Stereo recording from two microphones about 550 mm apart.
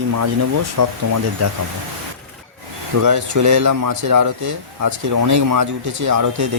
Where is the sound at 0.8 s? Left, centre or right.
Right.